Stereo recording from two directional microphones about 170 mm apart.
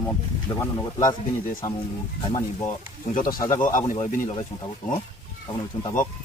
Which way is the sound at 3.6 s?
50° left (ahead or behind).